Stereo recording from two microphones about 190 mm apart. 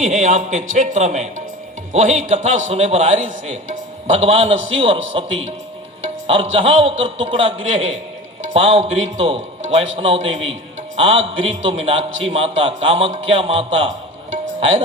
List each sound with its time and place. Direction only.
0.0 s a man's voice: 40° right (ahead or behind)
8.5 s a man's voice: 30° right (ahead or behind)